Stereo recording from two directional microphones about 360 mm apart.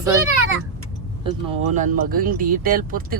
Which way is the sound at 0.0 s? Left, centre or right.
Centre.